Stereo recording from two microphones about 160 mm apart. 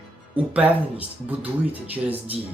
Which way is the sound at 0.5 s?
10° right (ahead or behind).